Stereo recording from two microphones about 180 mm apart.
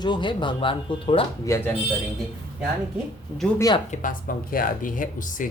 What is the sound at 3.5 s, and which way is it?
Speech, 20° left (ahead or behind).